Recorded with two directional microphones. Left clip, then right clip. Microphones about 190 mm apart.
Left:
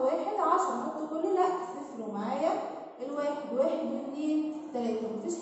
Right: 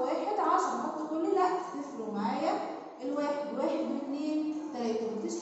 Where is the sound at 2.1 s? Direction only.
15° left (ahead or behind).